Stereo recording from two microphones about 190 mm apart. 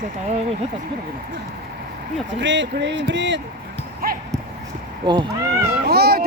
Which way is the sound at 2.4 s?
70° right (ahead or behind).